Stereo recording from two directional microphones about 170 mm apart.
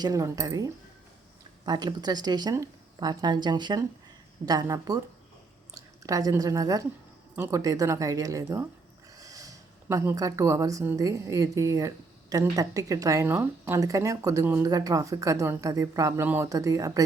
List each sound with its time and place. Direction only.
0.0 s a woman's voice: 20° right (ahead or behind)